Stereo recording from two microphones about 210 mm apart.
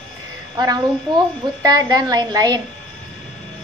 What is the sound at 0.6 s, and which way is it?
A child's voice, 20° right (ahead or behind).